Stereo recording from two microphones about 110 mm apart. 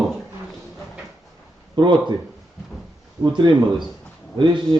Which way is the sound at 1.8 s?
40° right (ahead or behind).